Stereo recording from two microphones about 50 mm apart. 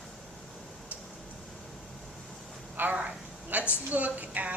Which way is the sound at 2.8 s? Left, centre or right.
Right.